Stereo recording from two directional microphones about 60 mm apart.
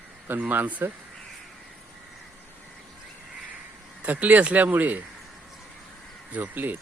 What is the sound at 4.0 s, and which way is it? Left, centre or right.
Speech, right.